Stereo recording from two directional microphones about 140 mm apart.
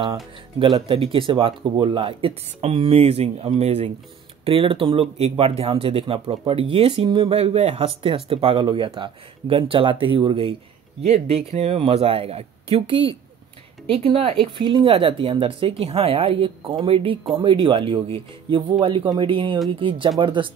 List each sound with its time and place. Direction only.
0.0 s speech: 35° right (ahead or behind)